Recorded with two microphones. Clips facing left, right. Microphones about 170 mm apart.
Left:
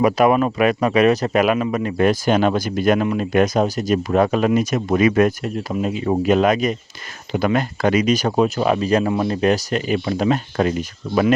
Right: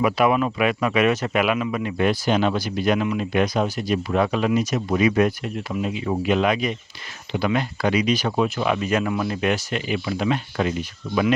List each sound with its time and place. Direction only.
0.0 s speech: 45° left (ahead or behind)